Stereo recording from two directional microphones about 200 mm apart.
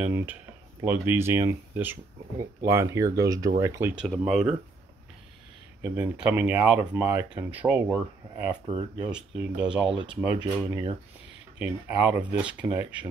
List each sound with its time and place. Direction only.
0.8 s speech: 10° right (ahead or behind)
3.9 s speech: 5° right (ahead or behind)
5.8 s speech: 5° right (ahead or behind)
8.6 s speech: 25° right (ahead or behind)
9.0 s speech: 5° right (ahead or behind)
9.9 s speech: 25° right (ahead or behind)
11.5 s speech: 10° right (ahead or behind)